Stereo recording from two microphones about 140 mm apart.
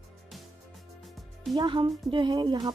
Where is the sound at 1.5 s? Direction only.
35° right (ahead or behind).